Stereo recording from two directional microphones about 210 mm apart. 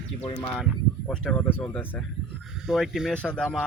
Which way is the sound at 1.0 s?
5° left (ahead or behind).